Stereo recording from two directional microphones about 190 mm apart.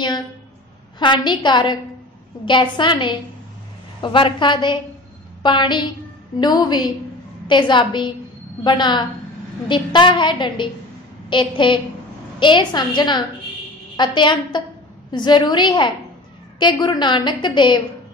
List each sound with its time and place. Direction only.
0.9 s a woman's voice: 25° left (ahead or behind)